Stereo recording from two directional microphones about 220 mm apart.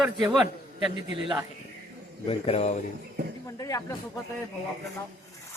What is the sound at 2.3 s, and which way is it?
Speech, 30° left (ahead or behind).